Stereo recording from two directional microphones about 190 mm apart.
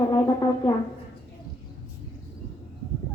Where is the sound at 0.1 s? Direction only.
25° left (ahead or behind).